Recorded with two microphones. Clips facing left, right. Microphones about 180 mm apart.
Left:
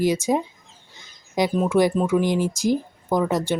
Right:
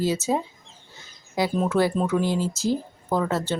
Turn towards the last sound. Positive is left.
turn(degrees=15)  # may be behind; listen again after turning